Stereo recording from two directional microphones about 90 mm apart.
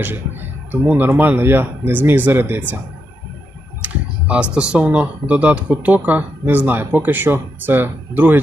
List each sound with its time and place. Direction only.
0.7 s speech: 20° right (ahead or behind)
3.8 s computer keyboard: 15° right (ahead or behind)
4.5 s speech: 10° right (ahead or behind)